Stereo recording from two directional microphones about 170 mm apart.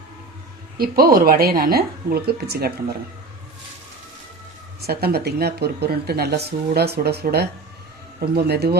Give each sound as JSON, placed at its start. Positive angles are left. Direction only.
{"t": 0.8, "sound": "a woman's voice", "side_deg": -60}
{"t": 4.9, "sound": "speech", "side_deg": -65}